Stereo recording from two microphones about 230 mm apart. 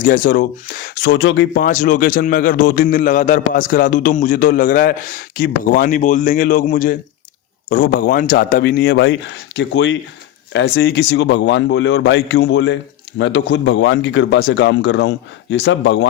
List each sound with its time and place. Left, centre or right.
0.0 s a man's voice: left
1.6 s a man's voice: left